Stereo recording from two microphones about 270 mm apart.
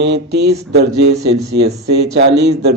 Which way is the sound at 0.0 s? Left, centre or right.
Right.